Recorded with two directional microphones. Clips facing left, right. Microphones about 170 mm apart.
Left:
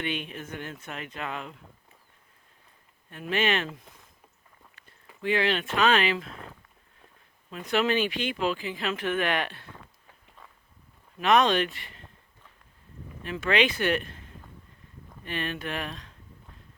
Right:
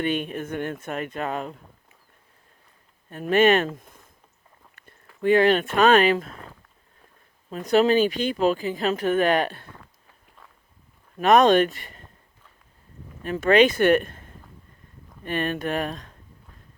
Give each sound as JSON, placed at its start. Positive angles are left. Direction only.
{"t": 0.0, "sound": "speech", "side_deg": -45}
{"t": 3.1, "sound": "speech", "side_deg": -45}
{"t": 5.2, "sound": "speech", "side_deg": -45}
{"t": 7.5, "sound": "speech", "side_deg": -40}
{"t": 11.2, "sound": "speech", "side_deg": -45}
{"t": 13.2, "sound": "speech", "side_deg": -45}